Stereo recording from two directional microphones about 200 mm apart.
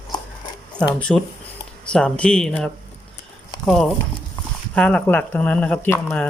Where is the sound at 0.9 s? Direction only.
5° left (ahead or behind).